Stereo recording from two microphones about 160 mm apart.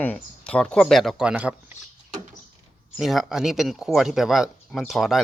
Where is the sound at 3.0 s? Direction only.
Centre (ahead or behind).